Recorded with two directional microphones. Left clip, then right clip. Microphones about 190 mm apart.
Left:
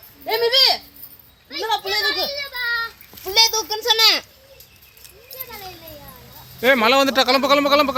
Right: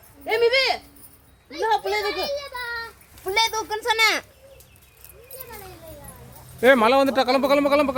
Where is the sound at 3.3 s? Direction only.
25° left (ahead or behind).